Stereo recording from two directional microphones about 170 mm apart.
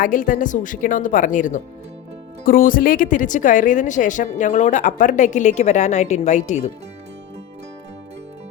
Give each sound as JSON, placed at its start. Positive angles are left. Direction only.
{"t": 0.0, "sound": "speech", "side_deg": 55}